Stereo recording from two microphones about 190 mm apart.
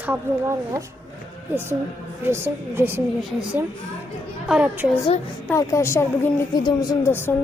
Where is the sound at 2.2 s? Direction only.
10° right (ahead or behind).